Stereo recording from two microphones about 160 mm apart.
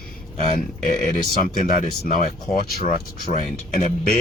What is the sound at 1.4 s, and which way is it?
Speech, 55° left (ahead or behind).